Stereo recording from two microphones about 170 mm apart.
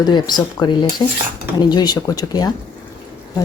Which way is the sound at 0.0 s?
25° left (ahead or behind).